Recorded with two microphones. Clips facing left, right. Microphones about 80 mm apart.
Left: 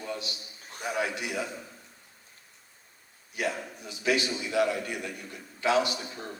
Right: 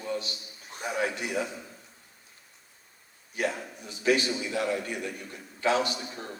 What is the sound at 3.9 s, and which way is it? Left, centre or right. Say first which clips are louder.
A man's voice: right 2 dB; right.